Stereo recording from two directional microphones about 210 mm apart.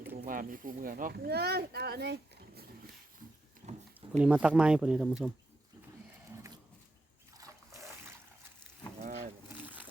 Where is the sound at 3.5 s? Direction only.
35° right (ahead or behind).